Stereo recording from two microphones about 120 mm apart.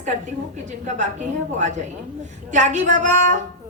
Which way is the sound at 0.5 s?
80° right.